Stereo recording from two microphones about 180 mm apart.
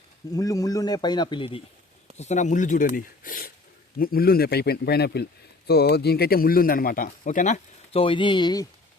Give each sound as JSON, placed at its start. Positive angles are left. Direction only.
{"t": 0.3, "sound": "speech", "side_deg": 20}